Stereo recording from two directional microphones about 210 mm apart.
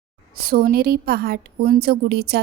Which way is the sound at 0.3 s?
45° right (ahead or behind).